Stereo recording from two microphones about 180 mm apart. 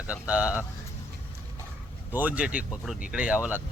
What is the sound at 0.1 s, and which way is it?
Speech, 5° right (ahead or behind).